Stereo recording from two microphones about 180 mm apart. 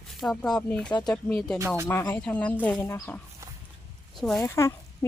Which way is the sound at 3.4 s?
15° right (ahead or behind).